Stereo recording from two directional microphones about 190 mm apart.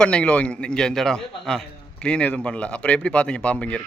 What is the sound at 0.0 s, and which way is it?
A man's voice, 5° left (ahead or behind).